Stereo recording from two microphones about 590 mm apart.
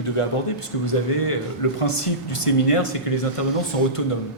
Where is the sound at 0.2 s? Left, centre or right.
Left.